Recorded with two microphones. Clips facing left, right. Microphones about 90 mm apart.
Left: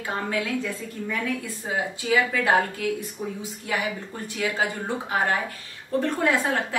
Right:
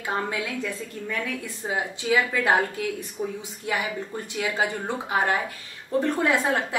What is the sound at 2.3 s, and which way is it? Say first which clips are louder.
Speech: left 1 dB; 15° right (ahead or behind).